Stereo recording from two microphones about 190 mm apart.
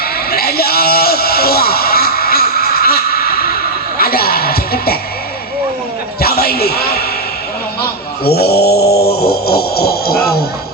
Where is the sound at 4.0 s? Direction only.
50° left (ahead or behind).